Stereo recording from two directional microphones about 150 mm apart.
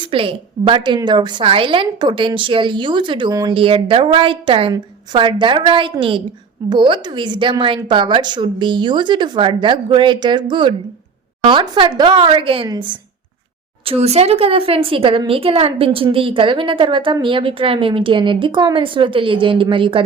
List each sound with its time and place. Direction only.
0.0 s a woman's voice: 35° right (ahead or behind)
13.8 s a woman's voice: 45° right (ahead or behind)